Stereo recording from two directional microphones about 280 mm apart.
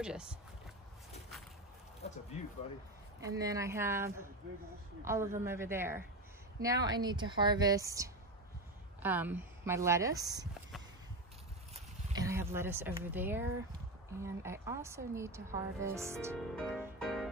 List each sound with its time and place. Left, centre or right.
0.0 s music: centre
3.2 s a woman's voice: centre
12.2 s a woman's voice: centre
16.1 s music: centre